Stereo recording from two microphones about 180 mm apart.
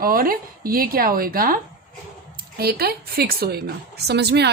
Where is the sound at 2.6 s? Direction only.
60° right (ahead or behind).